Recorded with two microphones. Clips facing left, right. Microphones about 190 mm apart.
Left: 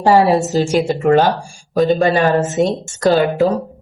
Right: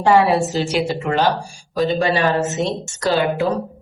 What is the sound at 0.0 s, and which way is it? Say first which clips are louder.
A woman's voice: left 2 dB; 35° left (ahead or behind).